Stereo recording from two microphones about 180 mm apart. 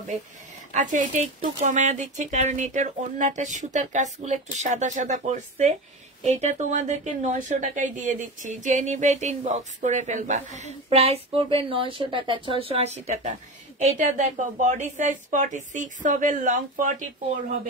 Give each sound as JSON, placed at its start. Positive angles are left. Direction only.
{"t": 0.7, "sound": "a woman's voice", "side_deg": -45}